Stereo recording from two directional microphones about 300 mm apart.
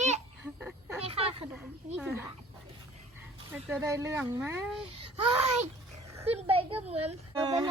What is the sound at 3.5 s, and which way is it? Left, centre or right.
A child's voice, centre.